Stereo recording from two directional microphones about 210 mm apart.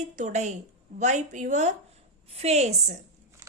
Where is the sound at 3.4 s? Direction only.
15° right (ahead or behind).